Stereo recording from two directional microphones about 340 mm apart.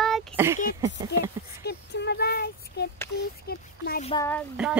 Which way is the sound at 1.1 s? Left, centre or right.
Left.